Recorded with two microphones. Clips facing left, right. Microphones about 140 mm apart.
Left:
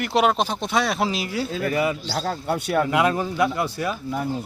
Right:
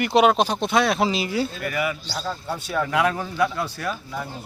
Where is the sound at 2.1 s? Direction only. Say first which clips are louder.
Left 4 dB; 70° left (ahead or behind).